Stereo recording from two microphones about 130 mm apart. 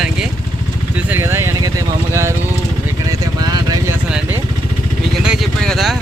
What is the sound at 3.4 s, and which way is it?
Vehicle, 30° right (ahead or behind).